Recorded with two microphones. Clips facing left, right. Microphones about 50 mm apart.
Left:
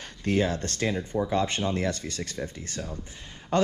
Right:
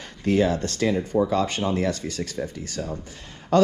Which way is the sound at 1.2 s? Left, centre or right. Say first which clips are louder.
Right 2 dB; right.